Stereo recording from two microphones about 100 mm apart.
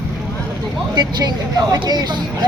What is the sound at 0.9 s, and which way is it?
Speech, 45° right (ahead or behind).